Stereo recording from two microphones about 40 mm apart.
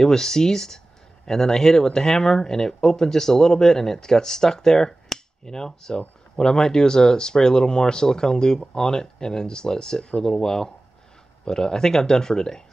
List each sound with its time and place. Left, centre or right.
0.0 s speech: centre